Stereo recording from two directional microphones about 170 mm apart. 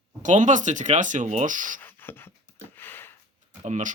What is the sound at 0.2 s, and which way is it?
Speech, 45° right (ahead or behind).